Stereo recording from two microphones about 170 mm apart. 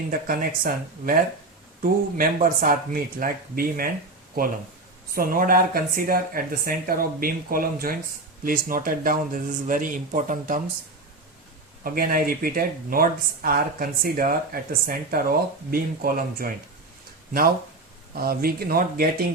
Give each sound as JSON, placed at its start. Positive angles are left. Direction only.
{"t": 0.1, "sound": "speech", "side_deg": -60}
{"t": 5.1, "sound": "speech", "side_deg": -60}
{"t": 11.8, "sound": "speech", "side_deg": -60}
{"t": 18.1, "sound": "speech", "side_deg": -60}